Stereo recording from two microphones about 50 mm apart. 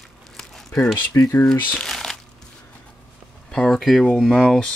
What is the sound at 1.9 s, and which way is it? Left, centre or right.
Crumpling, centre.